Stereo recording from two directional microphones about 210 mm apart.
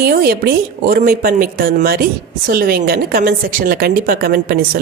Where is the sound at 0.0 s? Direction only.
45° right (ahead or behind).